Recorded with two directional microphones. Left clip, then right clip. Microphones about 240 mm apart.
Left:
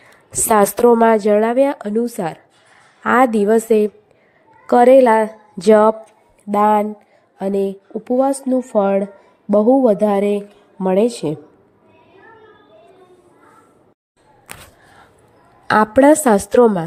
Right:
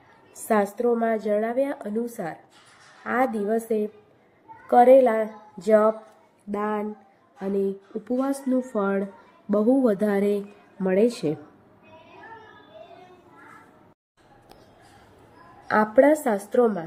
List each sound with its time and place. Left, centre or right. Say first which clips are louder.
0.4 s a woman's voice: left 10 dB; left
15.6 s a woman's voice: left 7 dB; left